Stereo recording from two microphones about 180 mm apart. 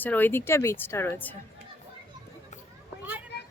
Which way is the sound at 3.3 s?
65° left (ahead or behind).